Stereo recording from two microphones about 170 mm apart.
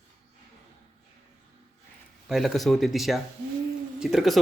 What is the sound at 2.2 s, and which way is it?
Speech, centre (ahead or behind).